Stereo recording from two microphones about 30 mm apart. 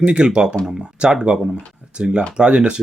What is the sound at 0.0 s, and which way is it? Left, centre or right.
Speech, right.